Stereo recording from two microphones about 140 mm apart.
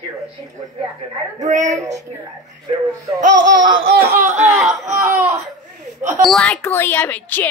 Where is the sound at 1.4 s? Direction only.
60° right (ahead or behind).